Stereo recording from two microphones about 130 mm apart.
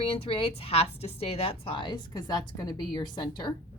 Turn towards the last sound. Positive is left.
turn(degrees=35)  # may be behind; listen again after turning